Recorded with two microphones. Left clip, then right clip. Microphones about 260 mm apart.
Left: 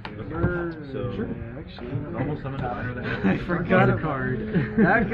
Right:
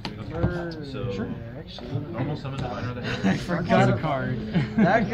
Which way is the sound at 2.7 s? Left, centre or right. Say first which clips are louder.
Left 1 dB; right.